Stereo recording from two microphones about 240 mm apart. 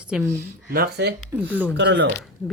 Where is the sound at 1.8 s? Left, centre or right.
Right.